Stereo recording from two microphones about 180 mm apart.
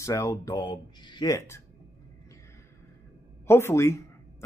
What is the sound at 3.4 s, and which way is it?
Speech, 15° left (ahead or behind).